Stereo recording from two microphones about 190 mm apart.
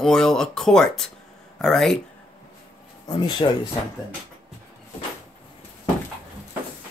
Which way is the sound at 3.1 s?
25° left (ahead or behind).